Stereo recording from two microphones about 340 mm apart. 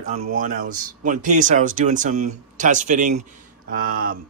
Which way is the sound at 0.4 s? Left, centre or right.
Right.